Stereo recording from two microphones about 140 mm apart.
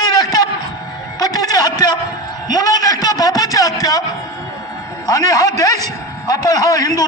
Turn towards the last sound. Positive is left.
turn(degrees=25)  # may be behind; listen again after turning